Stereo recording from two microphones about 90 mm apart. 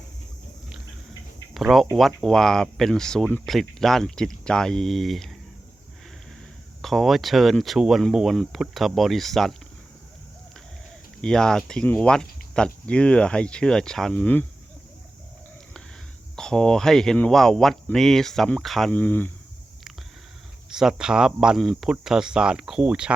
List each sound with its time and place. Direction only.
1.5 s speech: centre (ahead or behind)
6.8 s speech: centre (ahead or behind)
11.2 s speech: 10° left (ahead or behind)
16.3 s speech: 5° left (ahead or behind)
18.9 s speech: 20° left (ahead or behind)
20.7 s speech: 5° right (ahead or behind)